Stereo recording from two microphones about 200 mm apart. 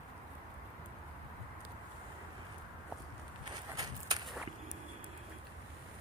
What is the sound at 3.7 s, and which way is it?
Walk, 20° right (ahead or behind).